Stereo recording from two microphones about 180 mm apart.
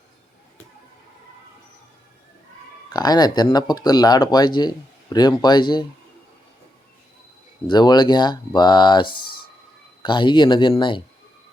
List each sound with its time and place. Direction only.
2.9 s speech: 20° left (ahead or behind)
7.7 s speech: 25° left (ahead or behind)